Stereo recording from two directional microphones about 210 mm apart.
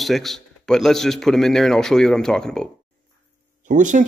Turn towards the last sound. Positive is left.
turn(degrees=-35)  # may be behind; listen again after turning